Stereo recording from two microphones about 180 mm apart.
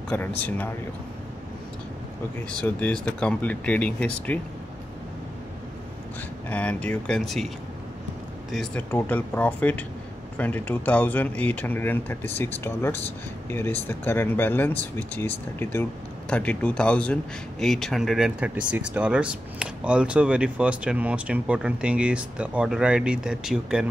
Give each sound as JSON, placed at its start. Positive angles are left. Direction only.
{"t": 0.1, "sound": "speech", "side_deg": 10}
{"t": 2.6, "sound": "speech", "side_deg": 5}
{"t": 6.5, "sound": "speech", "side_deg": 10}